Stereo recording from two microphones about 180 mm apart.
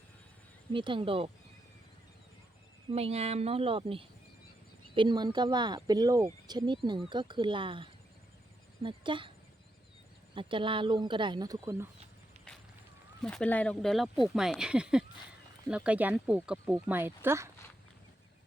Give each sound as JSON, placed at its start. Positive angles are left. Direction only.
{"t": 0.7, "sound": "speech", "side_deg": -30}
{"t": 2.9, "sound": "speech", "side_deg": -35}
{"t": 10.3, "sound": "speech", "side_deg": -30}
{"t": 13.2, "sound": "speech", "side_deg": 5}